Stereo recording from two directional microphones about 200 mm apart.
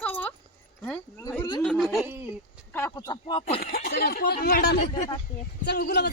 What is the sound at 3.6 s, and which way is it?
A man's voice, 50° left (ahead or behind).